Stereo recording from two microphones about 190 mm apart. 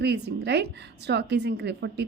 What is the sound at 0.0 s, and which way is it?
A woman's voice, 60° right (ahead or behind).